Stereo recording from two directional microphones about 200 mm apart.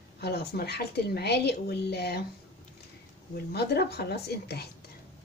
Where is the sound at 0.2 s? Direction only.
50° left (ahead or behind).